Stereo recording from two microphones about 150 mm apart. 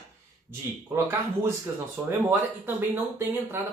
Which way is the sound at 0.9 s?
15° right (ahead or behind).